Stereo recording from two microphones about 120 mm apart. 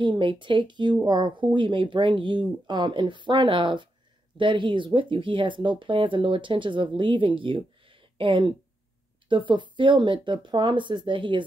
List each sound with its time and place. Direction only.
0.0 s speech: 40° right (ahead or behind)